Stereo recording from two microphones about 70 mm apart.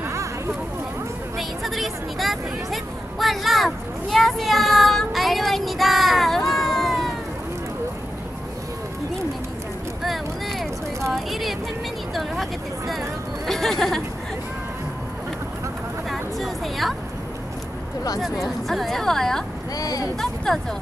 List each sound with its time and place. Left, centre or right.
0.0 s a sound: right
1.6 s speech: centre
6.6 s a sound: centre
10.0 s a sound: centre
13.5 s speech: centre
16.1 s music: centre
18.7 s a woman's voice: centre
19.8 s speech: left
20.2 s speech: centre